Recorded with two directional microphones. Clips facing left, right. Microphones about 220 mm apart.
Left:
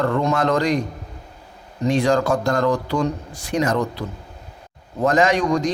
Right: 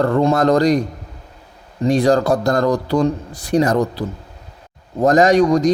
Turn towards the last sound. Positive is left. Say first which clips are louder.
# right 6 dB
turn(degrees=-40)  # may be behind; listen again after turning